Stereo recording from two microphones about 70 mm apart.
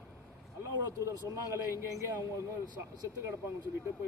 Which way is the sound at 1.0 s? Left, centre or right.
Right.